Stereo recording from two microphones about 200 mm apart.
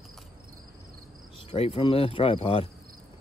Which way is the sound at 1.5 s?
30° left (ahead or behind).